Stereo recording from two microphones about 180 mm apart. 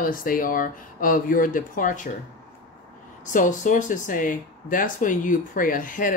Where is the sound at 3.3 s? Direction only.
45° left (ahead or behind).